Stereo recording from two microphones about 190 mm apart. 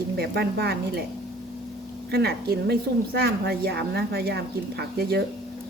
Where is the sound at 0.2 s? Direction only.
55° right (ahead or behind).